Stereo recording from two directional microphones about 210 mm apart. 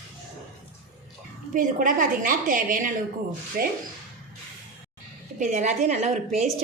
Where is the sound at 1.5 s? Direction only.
40° right (ahead or behind).